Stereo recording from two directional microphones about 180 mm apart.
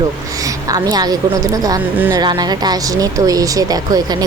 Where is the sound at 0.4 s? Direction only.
20° right (ahead or behind).